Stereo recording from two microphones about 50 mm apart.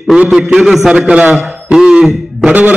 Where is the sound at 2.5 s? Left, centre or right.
Right.